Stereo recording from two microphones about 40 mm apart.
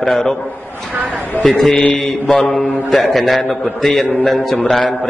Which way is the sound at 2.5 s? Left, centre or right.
Centre.